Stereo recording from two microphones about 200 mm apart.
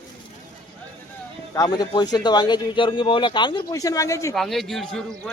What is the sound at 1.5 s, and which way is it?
Speech, 20° left (ahead or behind).